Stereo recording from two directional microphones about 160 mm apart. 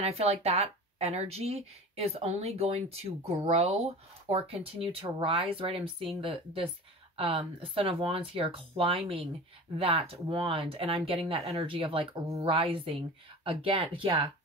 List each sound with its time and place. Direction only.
0.0 s speech: 40° right (ahead or behind)